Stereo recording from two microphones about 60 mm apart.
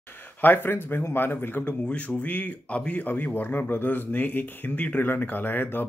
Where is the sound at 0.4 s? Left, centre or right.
Left.